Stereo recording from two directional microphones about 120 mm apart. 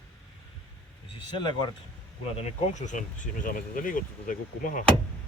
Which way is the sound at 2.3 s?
65° left (ahead or behind).